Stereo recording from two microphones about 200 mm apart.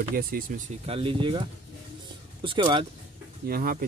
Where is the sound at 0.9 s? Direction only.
25° right (ahead or behind).